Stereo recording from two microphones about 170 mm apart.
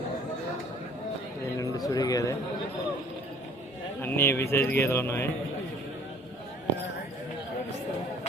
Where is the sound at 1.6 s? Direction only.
20° left (ahead or behind).